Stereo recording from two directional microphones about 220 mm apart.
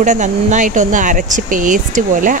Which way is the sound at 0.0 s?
35° right (ahead or behind).